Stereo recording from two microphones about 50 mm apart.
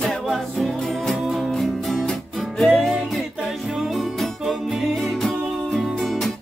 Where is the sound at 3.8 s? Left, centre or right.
Centre.